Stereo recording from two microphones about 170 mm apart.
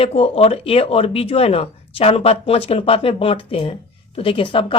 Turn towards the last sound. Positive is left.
turn(degrees=30)  # may be behind; listen again after turning